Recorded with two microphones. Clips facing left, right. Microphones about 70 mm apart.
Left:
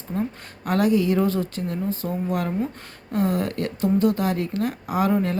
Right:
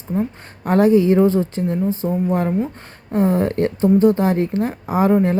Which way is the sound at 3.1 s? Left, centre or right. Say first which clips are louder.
Right 6 dB; right.